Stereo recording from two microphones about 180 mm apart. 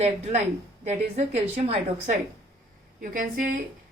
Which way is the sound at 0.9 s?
40° right (ahead or behind).